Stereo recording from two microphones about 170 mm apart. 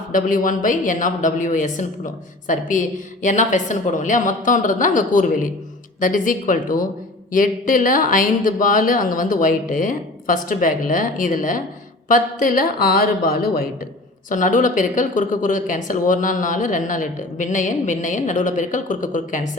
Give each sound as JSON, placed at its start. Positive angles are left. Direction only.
{"t": 0.1, "sound": "speech", "side_deg": 50}
{"t": 14.3, "sound": "speech", "side_deg": 50}